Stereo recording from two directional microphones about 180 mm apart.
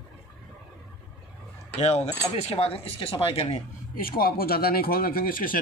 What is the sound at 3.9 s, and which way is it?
Speech, 55° left (ahead or behind).